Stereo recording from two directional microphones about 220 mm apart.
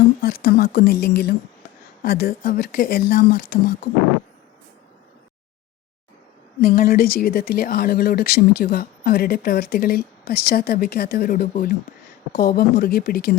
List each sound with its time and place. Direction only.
0.2 s speech: 45° left (ahead or behind)
6.6 s speech: 40° left (ahead or behind)